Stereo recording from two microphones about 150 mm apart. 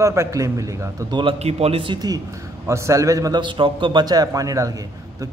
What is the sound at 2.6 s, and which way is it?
A man's voice, 20° right (ahead or behind).